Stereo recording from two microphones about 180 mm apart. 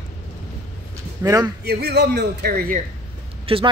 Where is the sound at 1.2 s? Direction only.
15° right (ahead or behind).